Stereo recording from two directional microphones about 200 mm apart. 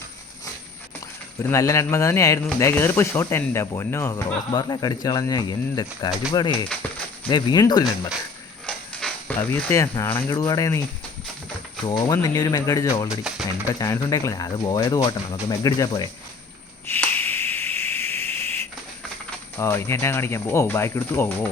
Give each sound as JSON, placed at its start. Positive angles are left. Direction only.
{"t": 1.4, "sound": "speech", "side_deg": 15}
{"t": 8.6, "sound": "mechanisms", "side_deg": 5}
{"t": 10.2, "sound": "speech", "side_deg": 20}
{"t": 11.9, "sound": "speech", "side_deg": 20}
{"t": 16.8, "sound": "a sound", "side_deg": 10}
{"t": 19.5, "sound": "speech", "side_deg": 15}